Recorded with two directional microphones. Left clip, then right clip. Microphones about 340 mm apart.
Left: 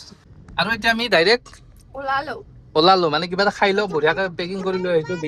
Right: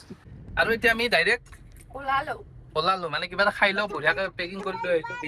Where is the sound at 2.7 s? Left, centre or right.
Centre.